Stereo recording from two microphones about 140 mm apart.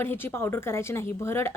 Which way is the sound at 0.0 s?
15° left (ahead or behind).